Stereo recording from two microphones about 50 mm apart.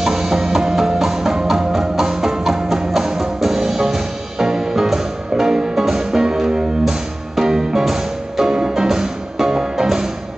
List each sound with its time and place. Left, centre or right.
0.0 s music: centre